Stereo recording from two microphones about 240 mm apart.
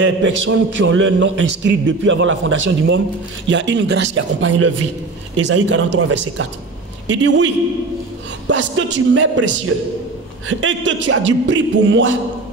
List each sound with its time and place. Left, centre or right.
0.0 s speech: right
10.6 s speech: right